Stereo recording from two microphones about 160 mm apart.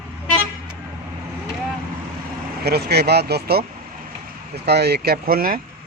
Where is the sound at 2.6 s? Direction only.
85° right.